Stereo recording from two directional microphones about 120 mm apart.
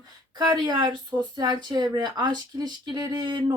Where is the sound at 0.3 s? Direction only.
35° right (ahead or behind).